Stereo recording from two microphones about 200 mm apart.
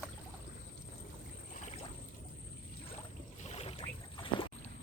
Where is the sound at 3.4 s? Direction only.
30° left (ahead or behind).